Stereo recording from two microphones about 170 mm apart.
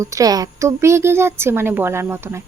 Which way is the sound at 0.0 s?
20° right (ahead or behind).